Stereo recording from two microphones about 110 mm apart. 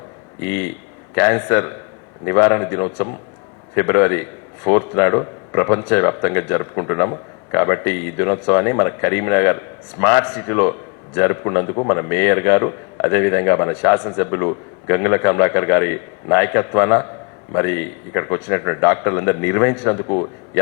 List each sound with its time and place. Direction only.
0.4 s speech: 20° left (ahead or behind)